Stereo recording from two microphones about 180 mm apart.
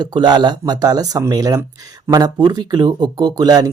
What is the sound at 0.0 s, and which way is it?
Speech, 25° right (ahead or behind).